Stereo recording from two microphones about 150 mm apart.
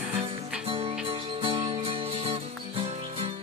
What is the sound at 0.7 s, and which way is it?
Music, 40° right (ahead or behind).